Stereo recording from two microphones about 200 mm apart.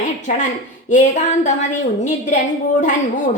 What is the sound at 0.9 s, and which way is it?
A woman's voice, 40° left (ahead or behind).